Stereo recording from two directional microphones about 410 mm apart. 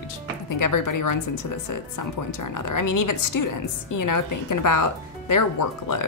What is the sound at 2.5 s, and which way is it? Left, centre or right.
A woman's voice, left.